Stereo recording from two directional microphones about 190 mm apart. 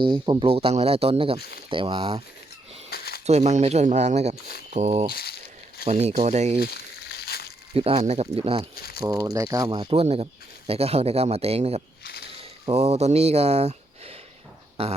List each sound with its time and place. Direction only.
0.3 s speech: 30° right (ahead or behind)
2.9 s a sound: 55° left (ahead or behind)
3.2 s speech: 35° right (ahead or behind)
5.1 s a sound: 55° left (ahead or behind)
5.9 s speech: 35° right (ahead or behind)
6.6 s crumpling: 55° left (ahead or behind)
7.7 s speech: 30° right (ahead or behind)
8.7 s speech: 55° left (ahead or behind)
9.0 s speech: 20° right (ahead or behind)
9.7 s speech: 30° right (ahead or behind)